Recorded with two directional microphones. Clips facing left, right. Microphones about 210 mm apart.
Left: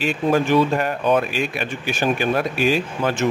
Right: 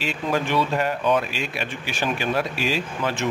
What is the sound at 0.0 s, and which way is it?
Speech, 50° left (ahead or behind).